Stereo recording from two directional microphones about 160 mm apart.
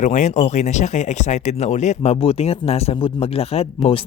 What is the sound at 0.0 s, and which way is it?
Speech, 50° left (ahead or behind).